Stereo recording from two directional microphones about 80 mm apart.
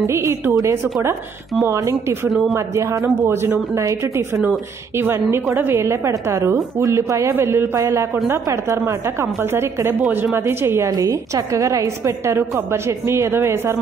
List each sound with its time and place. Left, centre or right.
0.0 s a woman's voice: right
0.6 s a woman's voice: right
1.6 s a woman's voice: right
11.0 s a woman's voice: right